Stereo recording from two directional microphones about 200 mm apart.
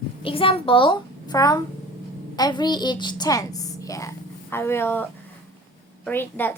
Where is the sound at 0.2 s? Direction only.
25° left (ahead or behind); by 5.0 s 10° left (ahead or behind).